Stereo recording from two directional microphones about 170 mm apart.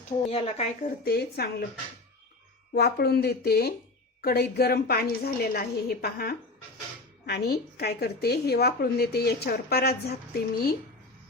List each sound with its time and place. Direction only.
0.3 s speech: 35° left (ahead or behind)
1.0 s a woman's voice: 70° left (ahead or behind)
2.7 s a woman's voice: 70° left (ahead or behind)